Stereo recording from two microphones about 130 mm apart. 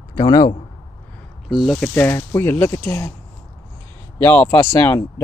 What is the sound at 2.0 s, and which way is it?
Speech, 20° left (ahead or behind).